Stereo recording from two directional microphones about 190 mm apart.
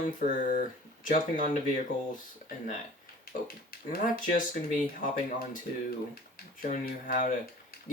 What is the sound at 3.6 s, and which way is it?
Speech, 45° left (ahead or behind).